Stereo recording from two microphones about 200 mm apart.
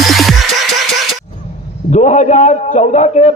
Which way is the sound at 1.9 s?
35° left (ahead or behind).